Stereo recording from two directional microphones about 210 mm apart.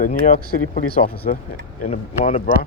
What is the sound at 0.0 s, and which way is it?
Speech, 40° left (ahead or behind).